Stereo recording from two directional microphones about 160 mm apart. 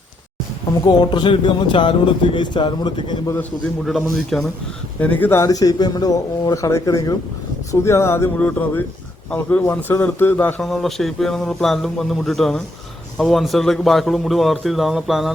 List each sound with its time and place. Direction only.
0.9 s speech: 30° left (ahead or behind)
3.8 s a man's voice: centre (ahead or behind)